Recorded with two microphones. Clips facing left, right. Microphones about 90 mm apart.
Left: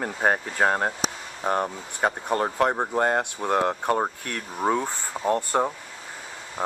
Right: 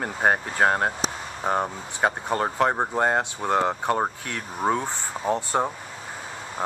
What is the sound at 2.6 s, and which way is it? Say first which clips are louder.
Speech: right 1 dB; 15° right (ahead or behind).